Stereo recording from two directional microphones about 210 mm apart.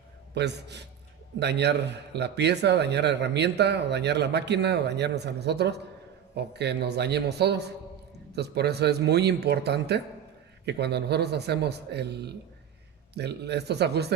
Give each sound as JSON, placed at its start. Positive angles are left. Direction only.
{"t": 0.3, "sound": "a man's voice", "side_deg": -55}